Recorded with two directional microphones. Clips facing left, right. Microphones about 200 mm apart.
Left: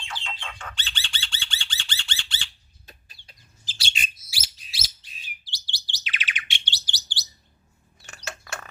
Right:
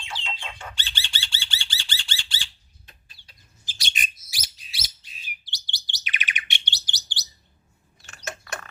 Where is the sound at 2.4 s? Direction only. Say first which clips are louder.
Even; 90° right.